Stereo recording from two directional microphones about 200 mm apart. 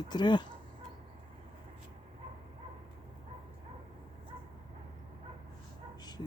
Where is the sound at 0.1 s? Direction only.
20° left (ahead or behind).